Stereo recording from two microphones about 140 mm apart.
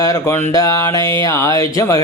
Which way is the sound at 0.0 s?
25° left (ahead or behind).